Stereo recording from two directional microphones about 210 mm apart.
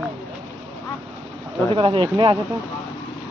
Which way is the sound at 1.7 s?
25° right (ahead or behind).